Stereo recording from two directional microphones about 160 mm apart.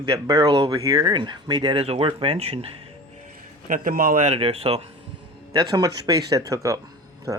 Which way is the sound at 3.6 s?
60° right (ahead or behind).